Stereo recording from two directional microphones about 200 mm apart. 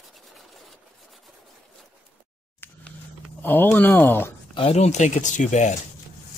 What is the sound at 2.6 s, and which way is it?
Camera, 10° left (ahead or behind).